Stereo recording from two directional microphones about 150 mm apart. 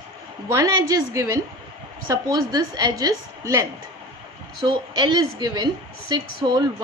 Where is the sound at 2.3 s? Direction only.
25° right (ahead or behind).